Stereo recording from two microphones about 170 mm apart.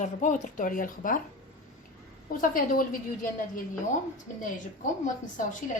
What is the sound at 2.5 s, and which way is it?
Speech, 55° left (ahead or behind).